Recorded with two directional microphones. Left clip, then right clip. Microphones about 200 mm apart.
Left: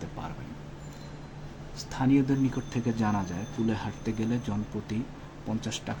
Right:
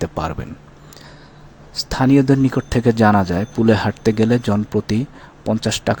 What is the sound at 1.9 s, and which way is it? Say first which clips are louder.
A man's voice: right 11 dB; 55° right (ahead or behind).